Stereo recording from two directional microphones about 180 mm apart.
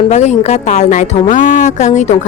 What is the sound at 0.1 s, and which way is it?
A woman's voice, 40° left (ahead or behind).